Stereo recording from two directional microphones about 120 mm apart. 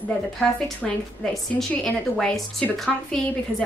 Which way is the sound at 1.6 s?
5° left (ahead or behind).